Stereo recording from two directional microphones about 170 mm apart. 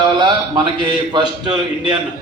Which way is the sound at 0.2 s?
25° right (ahead or behind).